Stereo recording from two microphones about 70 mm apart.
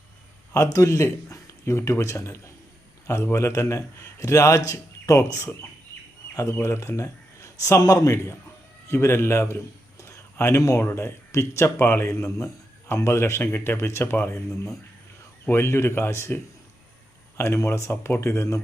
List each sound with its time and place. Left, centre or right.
0.5 s a man's voice: left
6.5 s speech: left
10.0 s a sound: left
10.8 s a man's voice: left